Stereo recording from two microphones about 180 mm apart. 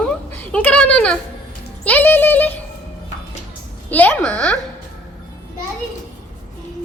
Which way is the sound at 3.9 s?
10° left (ahead or behind).